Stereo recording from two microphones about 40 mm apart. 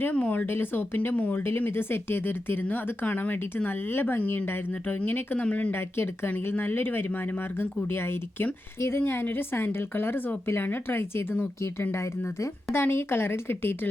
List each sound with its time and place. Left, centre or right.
0.0 s speech: left
0.4 s speech: left
1.5 s speech: left
2.6 s speech: left
5.0 s speech: left
5.5 s speech: left
5.7 s speech: left
6.4 s speech: left
9.2 s speech: left
10.4 s speech: left
10.7 s speech: left
12.7 s speech: left